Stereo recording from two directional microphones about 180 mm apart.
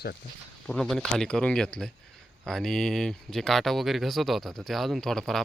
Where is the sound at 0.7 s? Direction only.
Centre (ahead or behind).